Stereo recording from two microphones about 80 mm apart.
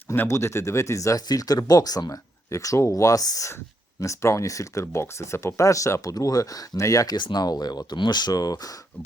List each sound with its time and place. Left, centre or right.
0.1 s speech: left
4.0 s speech: left
7.2 s speech: left